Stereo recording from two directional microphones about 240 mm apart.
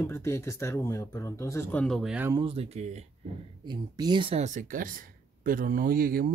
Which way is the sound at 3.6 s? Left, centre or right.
Centre.